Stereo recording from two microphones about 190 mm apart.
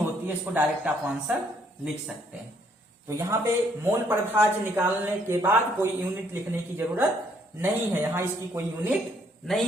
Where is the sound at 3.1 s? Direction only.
15° right (ahead or behind).